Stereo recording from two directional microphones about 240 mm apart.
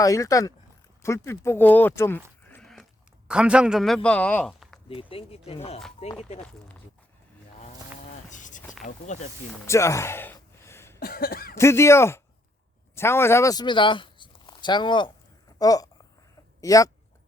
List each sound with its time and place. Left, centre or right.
0.0 s speech: centre
2.5 s dog: centre
3.2 s a man's voice: centre
4.9 s speech: left
8.3 s a sound: left
9.6 s a sound: centre
11.0 s cough: left
11.5 s speech: centre